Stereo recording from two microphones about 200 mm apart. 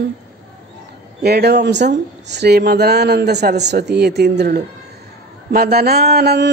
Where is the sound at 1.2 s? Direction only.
55° right (ahead or behind).